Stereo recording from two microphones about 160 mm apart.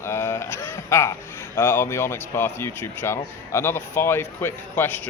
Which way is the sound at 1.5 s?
15° left (ahead or behind).